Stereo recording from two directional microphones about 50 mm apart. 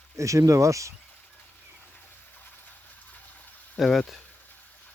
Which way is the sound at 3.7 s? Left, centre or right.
Centre.